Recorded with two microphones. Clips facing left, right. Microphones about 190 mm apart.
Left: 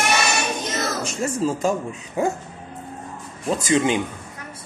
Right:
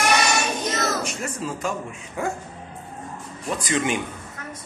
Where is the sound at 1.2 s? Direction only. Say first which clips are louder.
Left 7 dB; 25° left (ahead or behind).